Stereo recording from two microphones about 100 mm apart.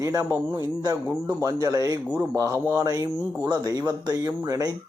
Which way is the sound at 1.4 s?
35° right (ahead or behind).